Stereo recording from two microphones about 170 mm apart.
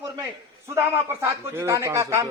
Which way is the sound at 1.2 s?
15° right (ahead or behind).